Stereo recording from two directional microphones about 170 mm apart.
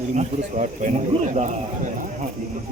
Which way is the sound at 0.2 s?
45° right (ahead or behind).